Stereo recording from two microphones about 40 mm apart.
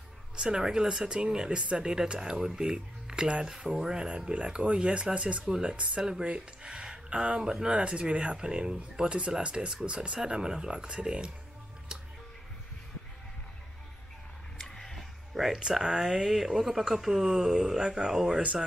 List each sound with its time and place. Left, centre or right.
0.4 s speech: centre
3.4 s speech: centre
14.8 s a sound: centre
15.3 s speech: centre